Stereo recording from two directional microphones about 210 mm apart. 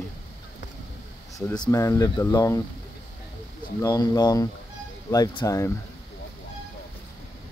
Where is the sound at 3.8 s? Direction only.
20° left (ahead or behind).